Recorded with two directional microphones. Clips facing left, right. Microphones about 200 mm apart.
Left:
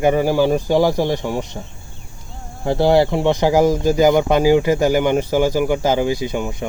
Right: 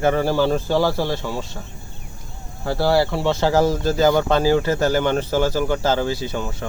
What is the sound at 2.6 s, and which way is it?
Speech, 20° left (ahead or behind).